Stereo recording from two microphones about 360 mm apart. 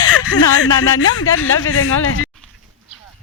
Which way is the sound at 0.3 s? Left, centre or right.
Left.